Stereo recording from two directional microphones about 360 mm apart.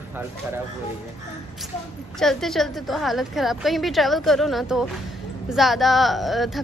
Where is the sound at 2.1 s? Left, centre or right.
Centre.